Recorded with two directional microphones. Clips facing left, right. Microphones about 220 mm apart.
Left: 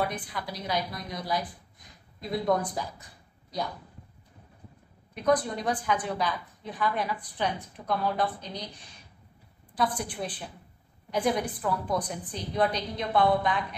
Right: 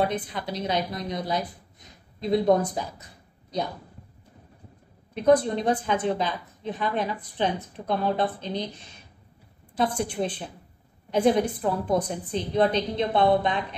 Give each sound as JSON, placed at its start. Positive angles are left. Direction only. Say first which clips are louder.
{"t": 0.0, "sound": "a woman's voice", "louder": "right 5 dB", "side_deg": -25}
{"t": 5.1, "sound": "a woman's voice", "louder": "right 6 dB", "side_deg": -25}